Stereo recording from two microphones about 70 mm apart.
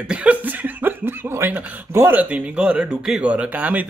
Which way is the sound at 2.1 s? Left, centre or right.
Centre.